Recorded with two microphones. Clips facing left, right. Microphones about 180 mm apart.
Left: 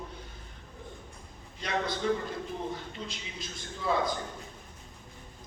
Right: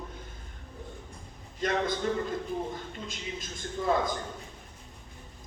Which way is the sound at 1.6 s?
50° right (ahead or behind).